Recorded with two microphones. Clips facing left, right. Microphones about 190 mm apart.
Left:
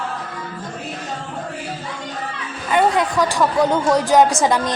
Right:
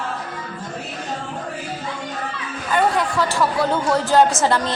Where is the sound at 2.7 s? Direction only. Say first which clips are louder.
Left 2 dB; 20° left (ahead or behind).